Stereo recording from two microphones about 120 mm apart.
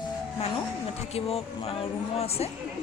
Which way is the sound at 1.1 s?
55° left (ahead or behind).